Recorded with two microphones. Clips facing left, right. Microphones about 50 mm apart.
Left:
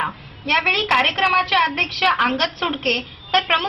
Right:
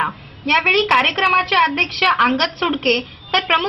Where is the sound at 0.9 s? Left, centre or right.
Right.